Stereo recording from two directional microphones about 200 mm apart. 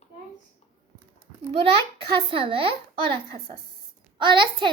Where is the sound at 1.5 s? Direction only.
25° right (ahead or behind).